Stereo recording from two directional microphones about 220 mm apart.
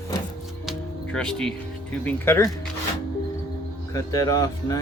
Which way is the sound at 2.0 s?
10° left (ahead or behind).